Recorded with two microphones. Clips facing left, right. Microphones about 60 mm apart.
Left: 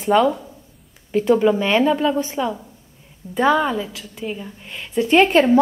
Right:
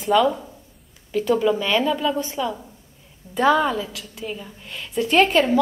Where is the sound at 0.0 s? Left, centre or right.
Left.